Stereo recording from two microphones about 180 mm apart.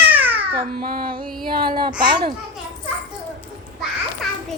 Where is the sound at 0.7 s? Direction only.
55° right (ahead or behind).